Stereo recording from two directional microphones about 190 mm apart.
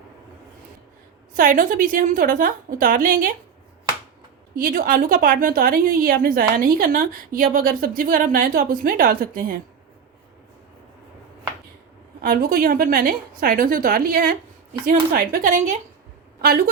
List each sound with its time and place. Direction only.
1.3 s a woman's voice: 45° right (ahead or behind)
4.5 s a woman's voice: 45° right (ahead or behind)
12.2 s a woman's voice: 50° right (ahead or behind)
16.4 s a woman's voice: 50° right (ahead or behind)